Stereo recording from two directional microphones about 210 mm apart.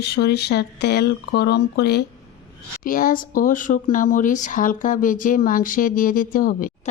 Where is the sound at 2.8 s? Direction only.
40° left (ahead or behind).